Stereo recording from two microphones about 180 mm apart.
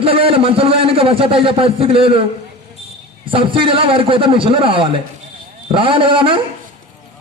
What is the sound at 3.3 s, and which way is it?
A man's voice, 30° right (ahead or behind).